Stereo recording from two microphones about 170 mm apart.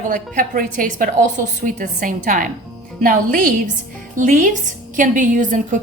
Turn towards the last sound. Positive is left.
turn(degrees=-50)  # may be behind; listen again after turning